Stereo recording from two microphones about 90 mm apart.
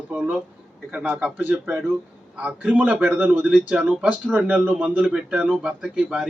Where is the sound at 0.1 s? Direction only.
15° right (ahead or behind).